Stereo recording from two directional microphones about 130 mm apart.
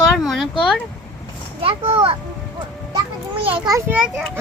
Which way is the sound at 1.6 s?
45° right (ahead or behind).